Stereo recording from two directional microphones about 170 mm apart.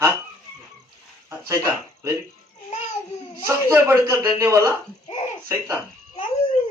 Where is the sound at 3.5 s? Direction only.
15° right (ahead or behind).